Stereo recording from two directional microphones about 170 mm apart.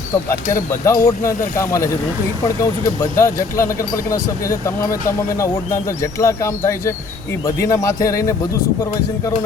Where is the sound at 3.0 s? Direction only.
20° left (ahead or behind).